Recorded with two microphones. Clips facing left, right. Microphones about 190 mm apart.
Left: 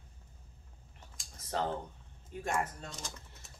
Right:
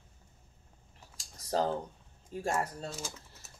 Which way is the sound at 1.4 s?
35° right (ahead or behind).